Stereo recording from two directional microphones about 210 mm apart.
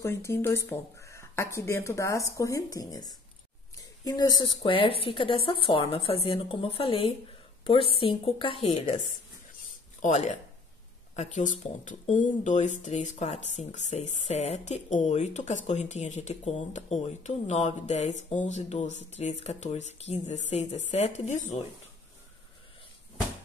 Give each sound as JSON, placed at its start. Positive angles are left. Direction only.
{"t": 0.0, "sound": "a woman's voice", "side_deg": 15}
{"t": 10.0, "sound": "speech", "side_deg": 35}